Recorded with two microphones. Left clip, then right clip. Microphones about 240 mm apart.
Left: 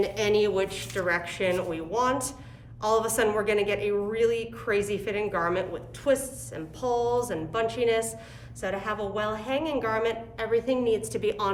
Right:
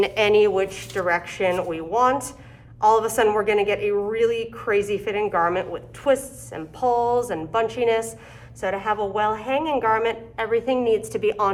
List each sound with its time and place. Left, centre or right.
0.0 s a woman's voice: centre
7.2 s a woman's voice: centre